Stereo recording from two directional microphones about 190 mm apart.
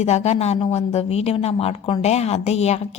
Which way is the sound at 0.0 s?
35° left (ahead or behind).